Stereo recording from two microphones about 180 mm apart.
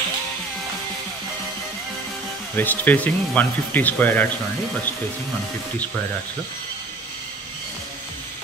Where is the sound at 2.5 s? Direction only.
10° left (ahead or behind).